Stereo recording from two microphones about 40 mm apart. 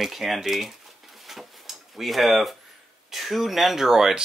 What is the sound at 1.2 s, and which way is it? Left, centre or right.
Drawer open or close, centre.